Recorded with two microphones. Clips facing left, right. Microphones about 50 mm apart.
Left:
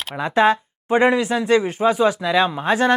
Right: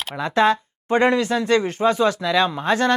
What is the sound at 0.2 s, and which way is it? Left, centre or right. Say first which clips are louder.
Speech: left 1 dB; centre.